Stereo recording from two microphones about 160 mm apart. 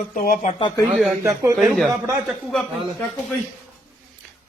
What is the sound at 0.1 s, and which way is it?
Speech, 60° left (ahead or behind).